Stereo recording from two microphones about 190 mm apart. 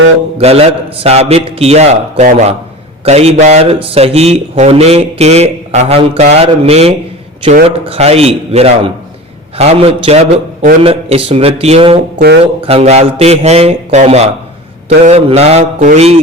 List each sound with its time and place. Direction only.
0.3 s a man's voice: 30° right (ahead or behind)